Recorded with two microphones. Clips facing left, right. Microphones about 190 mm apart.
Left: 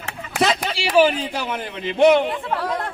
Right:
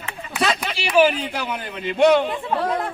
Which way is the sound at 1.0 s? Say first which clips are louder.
Even; 30° left (ahead or behind).